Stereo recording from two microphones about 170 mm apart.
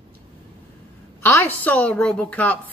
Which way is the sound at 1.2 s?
10° left (ahead or behind).